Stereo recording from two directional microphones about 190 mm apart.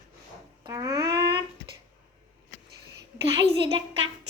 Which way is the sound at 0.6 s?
15° right (ahead or behind).